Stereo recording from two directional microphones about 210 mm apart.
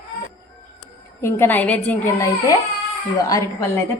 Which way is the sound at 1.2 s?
10° left (ahead or behind).